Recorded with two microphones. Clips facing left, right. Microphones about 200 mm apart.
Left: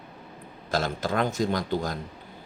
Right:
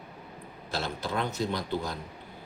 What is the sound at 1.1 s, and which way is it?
Speech, 50° left (ahead or behind).